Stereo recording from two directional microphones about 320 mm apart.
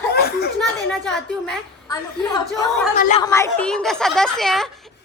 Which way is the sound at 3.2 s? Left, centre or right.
Centre.